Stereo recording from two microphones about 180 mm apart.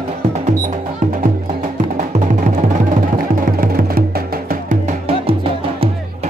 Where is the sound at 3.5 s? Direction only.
50° right (ahead or behind).